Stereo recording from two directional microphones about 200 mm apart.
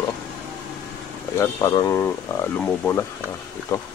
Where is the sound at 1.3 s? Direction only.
15° left (ahead or behind).